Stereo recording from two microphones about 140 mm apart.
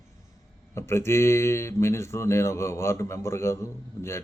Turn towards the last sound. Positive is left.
turn(degrees=20)  # may be behind; listen again after turning